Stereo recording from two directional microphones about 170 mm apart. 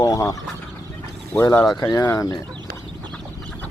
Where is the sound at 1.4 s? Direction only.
20° left (ahead or behind).